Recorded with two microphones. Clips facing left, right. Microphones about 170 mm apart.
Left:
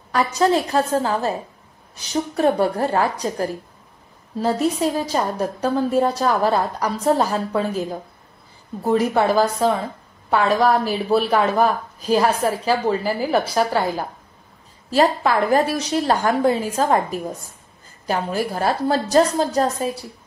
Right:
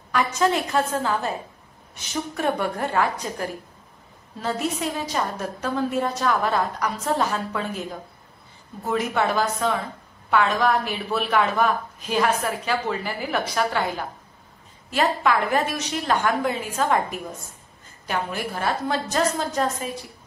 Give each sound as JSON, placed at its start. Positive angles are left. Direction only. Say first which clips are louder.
{"t": 0.1, "sound": "a woman's voice", "louder": "left 4 dB", "side_deg": 35}
{"t": 8.8, "sound": "a woman's voice", "louder": "left 6 dB", "side_deg": 30}